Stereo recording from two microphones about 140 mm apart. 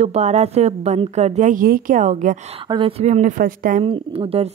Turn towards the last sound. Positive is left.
turn(degrees=-45)  # may be behind; listen again after turning